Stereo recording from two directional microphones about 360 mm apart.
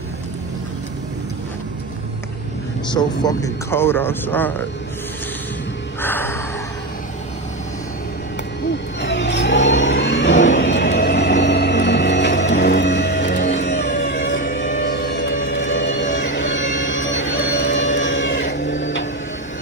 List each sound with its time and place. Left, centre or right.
2.9 s a man's voice: centre
5.9 s music: centre
9.0 s vehicle: left